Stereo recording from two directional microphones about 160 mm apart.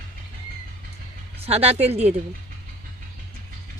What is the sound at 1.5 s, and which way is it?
Speech, 40° right (ahead or behind).